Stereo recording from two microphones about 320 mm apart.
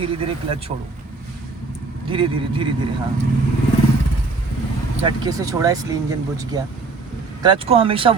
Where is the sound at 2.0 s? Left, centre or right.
Centre.